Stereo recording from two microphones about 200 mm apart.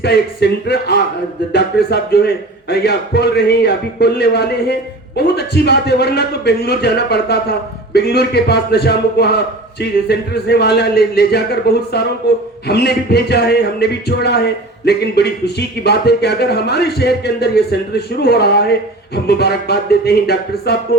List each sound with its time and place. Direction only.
0.0 s a man's voice: 55° left (ahead or behind)